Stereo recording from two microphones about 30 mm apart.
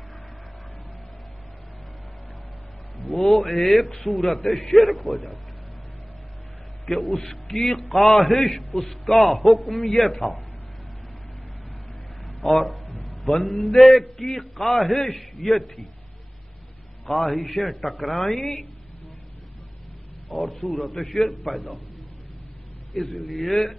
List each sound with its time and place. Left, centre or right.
3.2 s a man's voice: centre
5.1 s a man's voice: left
7.2 s a man's voice: centre
12.3 s a man's voice: centre
17.1 s a man's voice: centre
20.2 s a man's voice: centre
23.2 s a man's voice: centre